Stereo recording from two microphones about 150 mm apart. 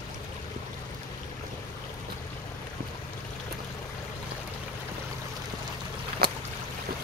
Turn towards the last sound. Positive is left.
turn(degrees=-90)